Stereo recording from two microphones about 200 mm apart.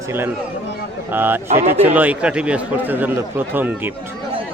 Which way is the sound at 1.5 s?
35° right (ahead or behind).